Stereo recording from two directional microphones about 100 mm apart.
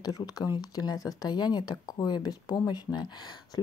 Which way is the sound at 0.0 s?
40° left (ahead or behind).